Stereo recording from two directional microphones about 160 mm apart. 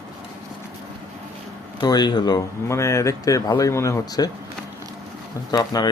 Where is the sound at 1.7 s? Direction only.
25° left (ahead or behind).